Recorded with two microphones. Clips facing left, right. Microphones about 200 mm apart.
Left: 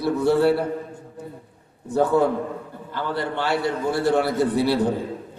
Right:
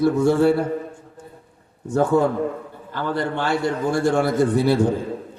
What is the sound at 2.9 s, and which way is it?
A man's voice, 50° right (ahead or behind).